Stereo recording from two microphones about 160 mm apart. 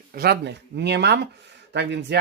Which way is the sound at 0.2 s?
85° right.